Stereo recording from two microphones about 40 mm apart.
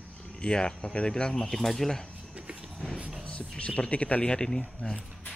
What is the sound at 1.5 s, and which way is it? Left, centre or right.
Speech, centre.